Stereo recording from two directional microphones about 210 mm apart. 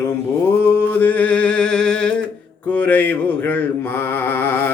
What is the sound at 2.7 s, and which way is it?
Mantra, 10° left (ahead or behind).